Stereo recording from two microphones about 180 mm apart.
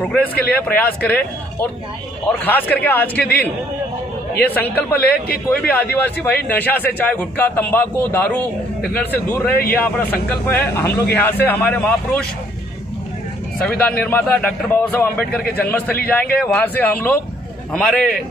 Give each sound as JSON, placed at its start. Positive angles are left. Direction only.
{"t": 0.0, "sound": "speech", "side_deg": 10}
{"t": 4.4, "sound": "speech", "side_deg": 10}
{"t": 13.6, "sound": "a man's voice", "side_deg": 5}